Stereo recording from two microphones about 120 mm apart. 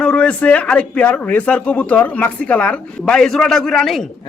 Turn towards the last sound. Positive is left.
turn(degrees=5)  # may be behind; listen again after turning